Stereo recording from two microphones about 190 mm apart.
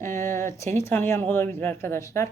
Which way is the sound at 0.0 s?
15° left (ahead or behind).